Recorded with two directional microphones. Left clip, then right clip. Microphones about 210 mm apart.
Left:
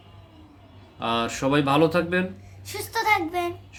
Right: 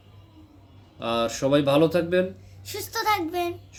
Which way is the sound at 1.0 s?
5° right (ahead or behind).